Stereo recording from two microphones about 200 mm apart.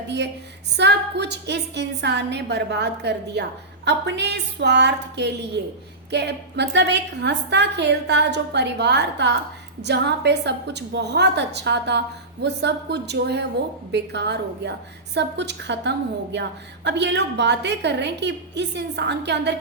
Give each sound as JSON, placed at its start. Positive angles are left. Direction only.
{"t": 0.8, "sound": "a woman's voice", "side_deg": -55}